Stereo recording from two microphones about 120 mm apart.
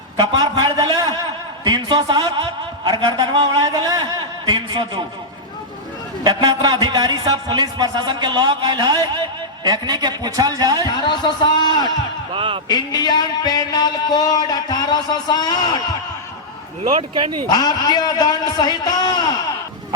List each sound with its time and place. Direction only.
0.2 s a man's voice: 30° right (ahead or behind)
6.2 s speech: 35° right (ahead or behind)
10.8 s speech: 40° left (ahead or behind)
12.3 s speech: 45° right (ahead or behind)
12.6 s speech: 35° left (ahead or behind)
17.5 s speech: 35° left (ahead or behind)